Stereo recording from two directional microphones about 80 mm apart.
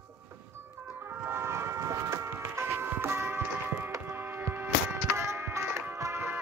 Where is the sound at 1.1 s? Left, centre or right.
Right.